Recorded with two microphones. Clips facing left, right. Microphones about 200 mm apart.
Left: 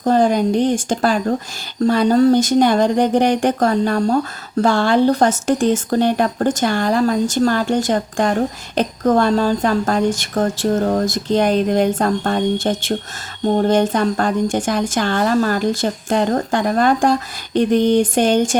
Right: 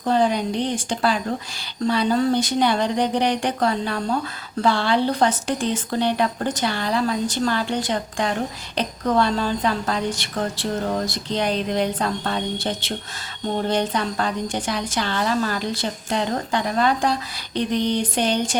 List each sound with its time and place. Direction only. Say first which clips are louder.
0.0 s speech: left 5 dB; 45° left (ahead or behind)